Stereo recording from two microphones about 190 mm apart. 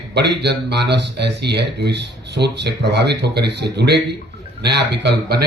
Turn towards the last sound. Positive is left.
turn(degrees=-60)  # may be behind; listen again after turning